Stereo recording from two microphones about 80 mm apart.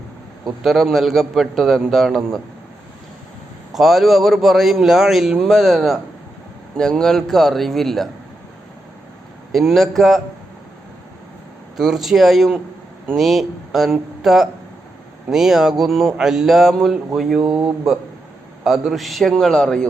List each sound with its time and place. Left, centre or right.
0.6 s a man's voice: centre
3.7 s a man's voice: centre
9.5 s a man's voice: centre
11.8 s a man's voice: centre
17.4 s speech: centre
18.6 s a man's voice: centre